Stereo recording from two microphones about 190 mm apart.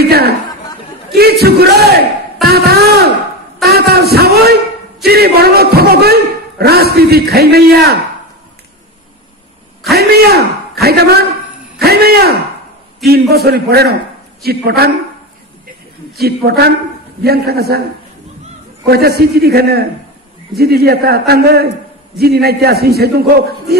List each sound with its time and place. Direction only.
0.0 s speech: 55° right (ahead or behind)
1.4 s a man's voice: 55° right (ahead or behind)
2.4 s a sound: 55° right (ahead or behind)
3.6 s a man's voice: 55° right (ahead or behind)
9.9 s a man's voice: 55° right (ahead or behind)
16.2 s a man's voice: 55° right (ahead or behind)
18.9 s a man's voice: 55° right (ahead or behind)